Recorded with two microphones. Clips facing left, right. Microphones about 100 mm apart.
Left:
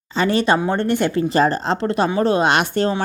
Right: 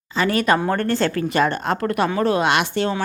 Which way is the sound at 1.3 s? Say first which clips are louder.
Left 2 dB; 35° left (ahead or behind).